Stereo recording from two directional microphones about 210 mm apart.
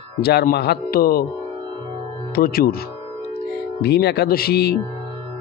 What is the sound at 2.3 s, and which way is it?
Speech, 45° left (ahead or behind).